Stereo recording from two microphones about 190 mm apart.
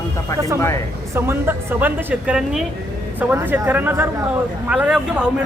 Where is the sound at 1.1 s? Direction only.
10° right (ahead or behind).